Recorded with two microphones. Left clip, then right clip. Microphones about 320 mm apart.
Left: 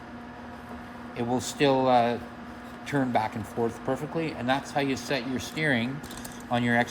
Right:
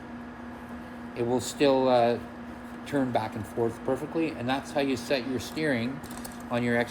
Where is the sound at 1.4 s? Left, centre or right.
Left.